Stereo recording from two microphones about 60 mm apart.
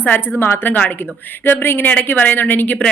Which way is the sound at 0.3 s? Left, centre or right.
Left.